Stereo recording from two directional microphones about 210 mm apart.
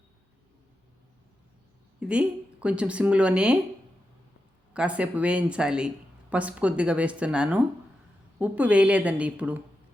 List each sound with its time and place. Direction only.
2.0 s speech: 5° right (ahead or behind)
4.7 s a woman's voice: 5° right (ahead or behind)